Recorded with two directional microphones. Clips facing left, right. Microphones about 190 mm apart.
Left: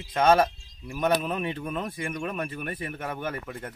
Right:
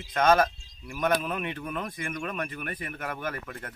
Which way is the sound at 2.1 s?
5° left (ahead or behind).